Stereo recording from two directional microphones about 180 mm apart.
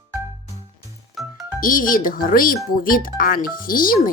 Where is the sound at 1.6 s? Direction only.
50° left (ahead or behind).